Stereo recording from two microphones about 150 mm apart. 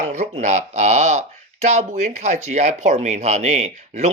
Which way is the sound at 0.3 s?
50° right (ahead or behind).